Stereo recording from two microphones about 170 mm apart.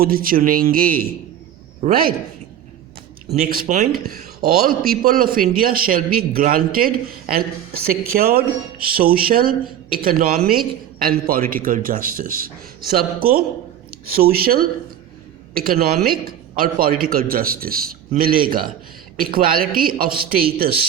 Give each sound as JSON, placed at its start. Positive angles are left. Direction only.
{"t": 0.0, "sound": "a man's voice", "side_deg": -60}
{"t": 3.3, "sound": "a man's voice", "side_deg": -60}